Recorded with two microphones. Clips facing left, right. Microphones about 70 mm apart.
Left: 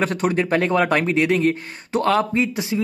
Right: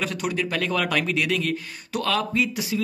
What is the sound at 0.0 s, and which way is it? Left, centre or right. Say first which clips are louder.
Speech: left 6 dB; left.